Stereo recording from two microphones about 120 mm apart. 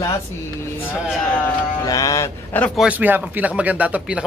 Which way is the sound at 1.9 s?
25° left (ahead or behind).